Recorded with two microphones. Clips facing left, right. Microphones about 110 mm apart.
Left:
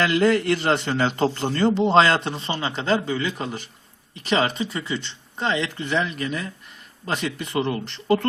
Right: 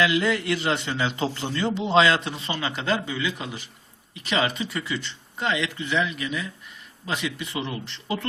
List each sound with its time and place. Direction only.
0.0 s a man's voice: 45° left (ahead or behind)